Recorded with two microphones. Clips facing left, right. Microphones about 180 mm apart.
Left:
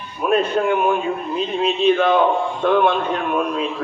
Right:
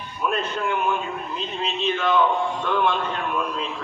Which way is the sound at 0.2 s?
55° left (ahead or behind).